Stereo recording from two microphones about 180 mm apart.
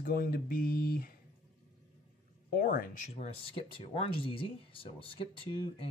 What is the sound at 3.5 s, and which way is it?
Speech, 30° left (ahead or behind).